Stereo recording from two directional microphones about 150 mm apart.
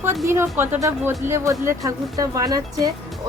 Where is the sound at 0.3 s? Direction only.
15° right (ahead or behind).